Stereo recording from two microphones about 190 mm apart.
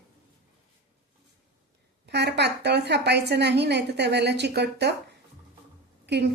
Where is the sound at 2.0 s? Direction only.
60° right (ahead or behind).